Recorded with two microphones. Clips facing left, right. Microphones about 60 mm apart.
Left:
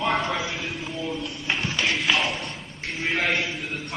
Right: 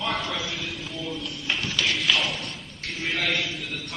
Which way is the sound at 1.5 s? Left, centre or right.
Left.